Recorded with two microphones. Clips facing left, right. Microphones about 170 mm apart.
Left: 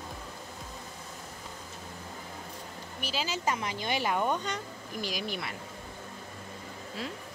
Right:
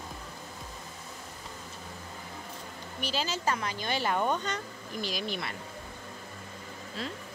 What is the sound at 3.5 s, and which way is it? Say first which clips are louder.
Speech: left 1 dB; 20° left (ahead or behind).